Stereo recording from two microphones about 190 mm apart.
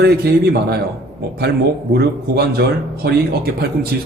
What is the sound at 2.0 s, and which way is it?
Speech, 55° right (ahead or behind).